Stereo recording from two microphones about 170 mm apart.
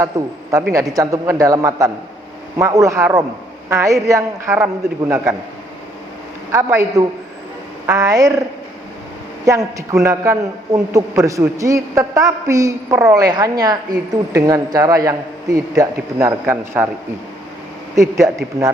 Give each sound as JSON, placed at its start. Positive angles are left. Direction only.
{"t": 0.1, "sound": "a man's voice", "side_deg": -20}
{"t": 6.5, "sound": "a man's voice", "side_deg": -15}
{"t": 17.9, "sound": "a man's voice", "side_deg": -15}